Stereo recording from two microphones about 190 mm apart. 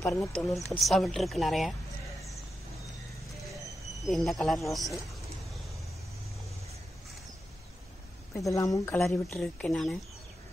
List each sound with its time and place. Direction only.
0.0 s speech: 5° left (ahead or behind)
4.1 s speech: centre (ahead or behind)
8.4 s speech: 15° left (ahead or behind)
9.0 s speech: centre (ahead or behind)